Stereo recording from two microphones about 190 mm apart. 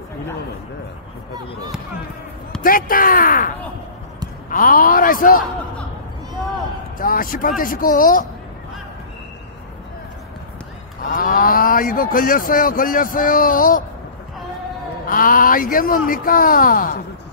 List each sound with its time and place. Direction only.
2.6 s speech: 50° left (ahead or behind)
7.0 s speech: 50° left (ahead or behind)
11.1 s speech: 45° left (ahead or behind)
15.0 s speech: 45° left (ahead or behind)